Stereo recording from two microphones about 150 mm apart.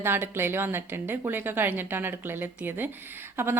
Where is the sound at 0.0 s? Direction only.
15° right (ahead or behind).